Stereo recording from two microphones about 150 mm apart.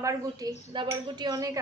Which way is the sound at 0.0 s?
25° right (ahead or behind).